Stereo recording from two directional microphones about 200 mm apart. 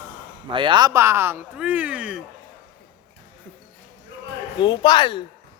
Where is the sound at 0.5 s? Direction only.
25° right (ahead or behind); by 2.2 s 5° right (ahead or behind).